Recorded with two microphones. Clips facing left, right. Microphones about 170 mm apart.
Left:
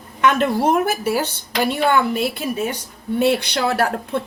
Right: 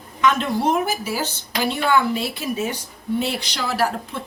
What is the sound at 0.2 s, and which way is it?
A woman's voice, 55° left (ahead or behind).